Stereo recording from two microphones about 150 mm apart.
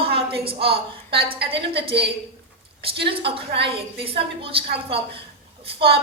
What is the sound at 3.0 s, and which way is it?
A woman's voice, 35° right (ahead or behind).